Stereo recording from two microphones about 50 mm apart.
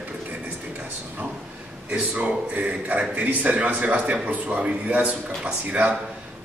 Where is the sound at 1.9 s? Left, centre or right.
Right.